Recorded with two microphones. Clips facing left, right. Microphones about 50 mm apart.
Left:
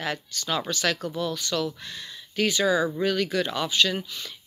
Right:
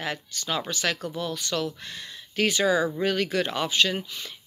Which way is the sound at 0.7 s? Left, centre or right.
Right.